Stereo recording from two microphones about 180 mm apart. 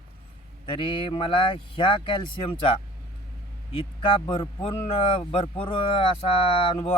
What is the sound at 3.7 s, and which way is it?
Speech, 30° left (ahead or behind).